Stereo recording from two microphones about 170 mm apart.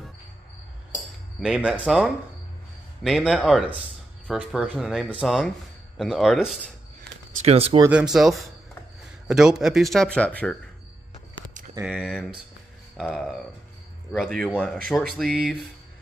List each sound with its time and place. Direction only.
1.4 s speech: 5° right (ahead or behind)
7.4 s speech: 35° right (ahead or behind)
7.9 s speech: 5° right (ahead or behind)
11.8 s speech: 5° right (ahead or behind)